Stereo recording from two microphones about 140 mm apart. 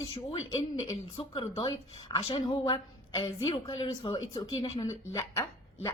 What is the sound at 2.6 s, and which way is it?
A woman's voice, 30° left (ahead or behind).